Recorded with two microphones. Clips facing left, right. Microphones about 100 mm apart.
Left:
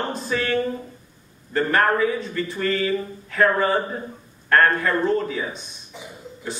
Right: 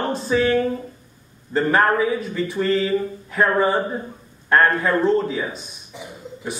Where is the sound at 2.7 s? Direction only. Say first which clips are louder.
Right 3 dB; 20° right (ahead or behind).